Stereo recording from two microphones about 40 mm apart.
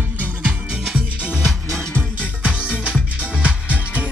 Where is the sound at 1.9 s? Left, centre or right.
Left.